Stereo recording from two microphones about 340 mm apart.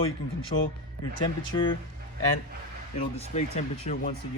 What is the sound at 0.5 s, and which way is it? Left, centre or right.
Speech, left.